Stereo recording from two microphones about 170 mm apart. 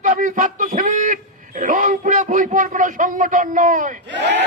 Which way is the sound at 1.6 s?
50° right (ahead or behind).